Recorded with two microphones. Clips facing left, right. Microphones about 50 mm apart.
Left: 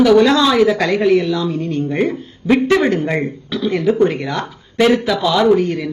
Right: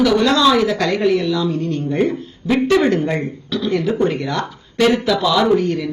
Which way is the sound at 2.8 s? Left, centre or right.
Centre.